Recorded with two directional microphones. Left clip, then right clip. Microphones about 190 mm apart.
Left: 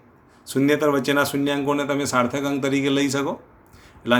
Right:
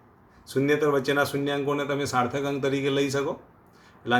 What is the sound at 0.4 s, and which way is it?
A man's voice, 45° left (ahead or behind).